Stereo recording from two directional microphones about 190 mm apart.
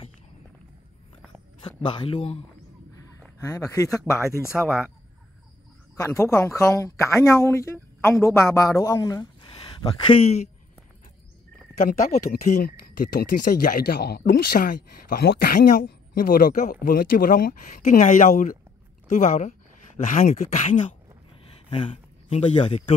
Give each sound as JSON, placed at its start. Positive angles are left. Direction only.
{"t": 1.6, "sound": "speech", "side_deg": 25}
{"t": 3.3, "sound": "speech", "side_deg": 15}
{"t": 4.5, "sound": "speech", "side_deg": -5}
{"t": 5.9, "sound": "speech", "side_deg": 15}
{"t": 12.3, "sound": "speech", "side_deg": 40}